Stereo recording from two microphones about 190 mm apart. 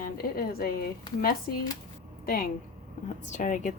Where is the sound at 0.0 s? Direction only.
50° left (ahead or behind).